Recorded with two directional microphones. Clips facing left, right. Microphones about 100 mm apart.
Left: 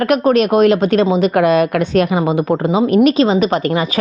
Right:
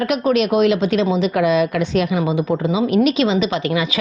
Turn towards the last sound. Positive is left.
turn(degrees=45)  # may be behind; listen again after turning